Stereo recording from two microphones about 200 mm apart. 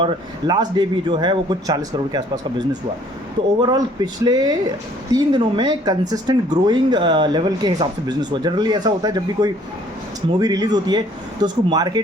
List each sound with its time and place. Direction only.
0.0 s speech: 20° right (ahead or behind)